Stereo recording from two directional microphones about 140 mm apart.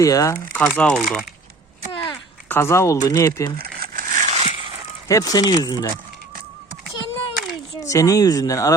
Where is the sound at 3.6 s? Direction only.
85° right; by 4.7 s 45° right (ahead or behind).